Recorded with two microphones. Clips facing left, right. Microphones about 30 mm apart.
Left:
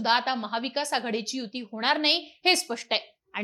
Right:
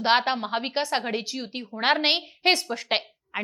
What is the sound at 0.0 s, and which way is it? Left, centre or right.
A woman's voice, centre.